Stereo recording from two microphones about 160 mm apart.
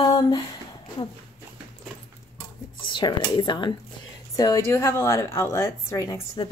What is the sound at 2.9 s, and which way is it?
A woman's voice, 30° left (ahead or behind).